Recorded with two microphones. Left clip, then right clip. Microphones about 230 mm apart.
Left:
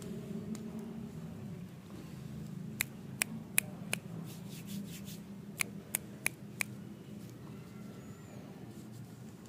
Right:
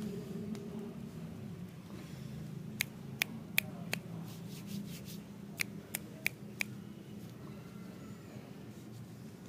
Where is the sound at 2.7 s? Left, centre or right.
Left.